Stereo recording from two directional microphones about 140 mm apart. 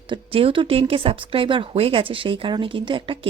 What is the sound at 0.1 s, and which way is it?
Speech, 40° right (ahead or behind).